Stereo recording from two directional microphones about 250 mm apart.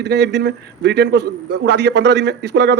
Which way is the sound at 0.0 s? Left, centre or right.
Right.